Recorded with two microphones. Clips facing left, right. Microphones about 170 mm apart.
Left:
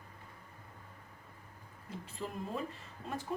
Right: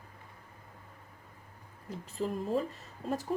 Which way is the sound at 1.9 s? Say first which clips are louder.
Right 7 dB; 40° right (ahead or behind).